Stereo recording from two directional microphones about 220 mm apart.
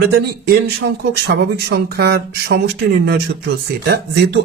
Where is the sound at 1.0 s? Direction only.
45° right (ahead or behind).